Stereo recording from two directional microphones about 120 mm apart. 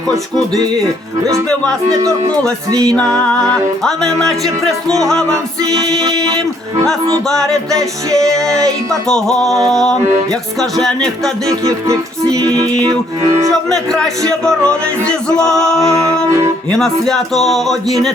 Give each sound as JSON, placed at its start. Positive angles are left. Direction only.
{"t": 0.3, "sound": "music", "side_deg": 5}
{"t": 2.8, "sound": "music", "side_deg": 5}
{"t": 6.2, "sound": "music", "side_deg": -30}
{"t": 6.8, "sound": "music", "side_deg": 5}
{"t": 12.8, "sound": "music", "side_deg": -35}
{"t": 13.7, "sound": "music", "side_deg": 5}